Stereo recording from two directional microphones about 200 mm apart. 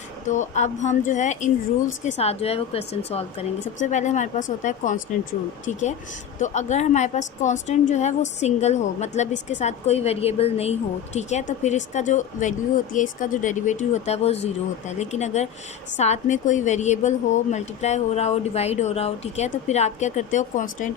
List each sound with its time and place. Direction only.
0.3 s a woman's voice: 35° left (ahead or behind)
6.4 s a woman's voice: 35° left (ahead or behind)